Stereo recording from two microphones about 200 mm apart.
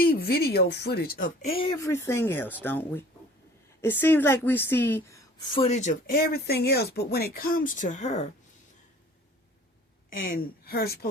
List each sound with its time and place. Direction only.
0.0 s speech: 50° left (ahead or behind)
1.4 s a woman's voice: 30° left (ahead or behind)
10.2 s speech: 45° left (ahead or behind)